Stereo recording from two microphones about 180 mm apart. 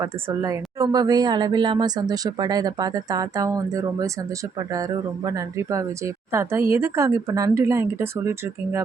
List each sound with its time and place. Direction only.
0.0 s a woman's voice: 20° right (ahead or behind)